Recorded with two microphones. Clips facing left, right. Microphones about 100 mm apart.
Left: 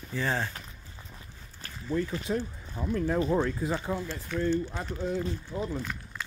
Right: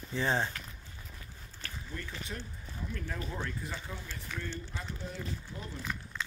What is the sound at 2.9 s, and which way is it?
Speech, 50° left (ahead or behind).